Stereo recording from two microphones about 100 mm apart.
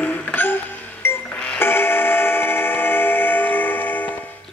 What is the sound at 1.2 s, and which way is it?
Music, 10° left (ahead or behind).